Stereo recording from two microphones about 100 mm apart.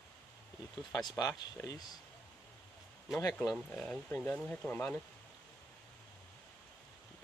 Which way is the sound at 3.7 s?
10° left (ahead or behind).